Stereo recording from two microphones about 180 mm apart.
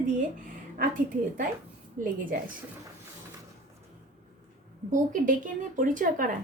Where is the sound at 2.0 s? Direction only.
45° right (ahead or behind).